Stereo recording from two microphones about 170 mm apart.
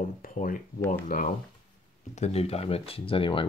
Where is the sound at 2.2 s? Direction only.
40° left (ahead or behind).